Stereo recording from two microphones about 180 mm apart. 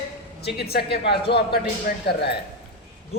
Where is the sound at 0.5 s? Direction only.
60° left (ahead or behind).